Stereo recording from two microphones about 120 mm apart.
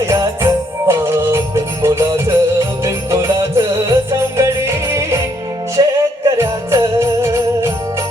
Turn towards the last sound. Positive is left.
turn(degrees=-25)  # may be behind; listen again after turning